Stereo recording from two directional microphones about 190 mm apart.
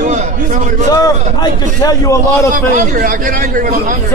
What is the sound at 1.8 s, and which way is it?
Speech, 15° left (ahead or behind).